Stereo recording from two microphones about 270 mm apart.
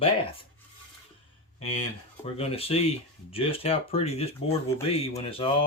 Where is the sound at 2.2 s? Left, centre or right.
Left.